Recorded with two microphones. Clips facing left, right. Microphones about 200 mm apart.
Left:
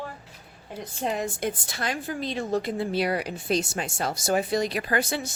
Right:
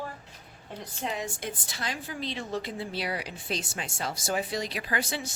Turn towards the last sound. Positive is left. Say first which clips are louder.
# left 5 dB
turn(degrees=45)  # may be behind; listen again after turning